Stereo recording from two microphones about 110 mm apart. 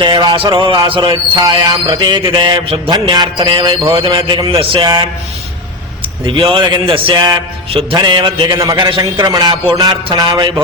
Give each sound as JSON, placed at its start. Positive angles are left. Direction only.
{"t": 0.0, "sound": "a man's voice", "side_deg": -45}
{"t": 1.4, "sound": "mantra", "side_deg": -35}
{"t": 2.9, "sound": "a man's voice", "side_deg": -40}
{"t": 6.2, "sound": "a man's voice", "side_deg": -50}
{"t": 7.9, "sound": "a man's voice", "side_deg": -40}
{"t": 8.8, "sound": "mantra", "side_deg": -45}